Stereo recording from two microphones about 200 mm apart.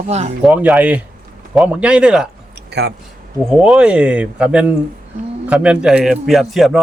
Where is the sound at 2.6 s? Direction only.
60° right (ahead or behind).